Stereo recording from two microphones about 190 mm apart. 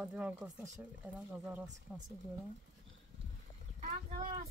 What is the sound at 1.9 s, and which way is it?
Speech, 5° right (ahead or behind).